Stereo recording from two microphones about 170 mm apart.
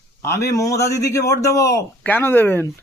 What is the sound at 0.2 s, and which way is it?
A man's voice, 15° left (ahead or behind).